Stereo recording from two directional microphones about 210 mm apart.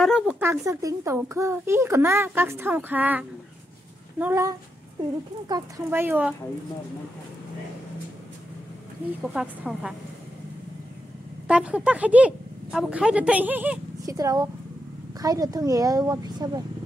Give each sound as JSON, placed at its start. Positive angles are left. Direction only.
{"t": 0.0, "sound": "a child's voice", "side_deg": -5}
{"t": 9.2, "sound": "a woman's voice", "side_deg": -5}
{"t": 11.4, "sound": "a woman's voice", "side_deg": -5}